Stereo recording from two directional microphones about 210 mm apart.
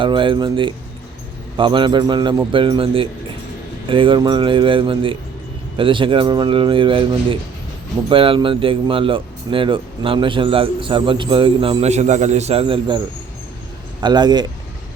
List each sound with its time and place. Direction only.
0.0 s speech: 25° right (ahead or behind)
14.0 s speech: 20° right (ahead or behind)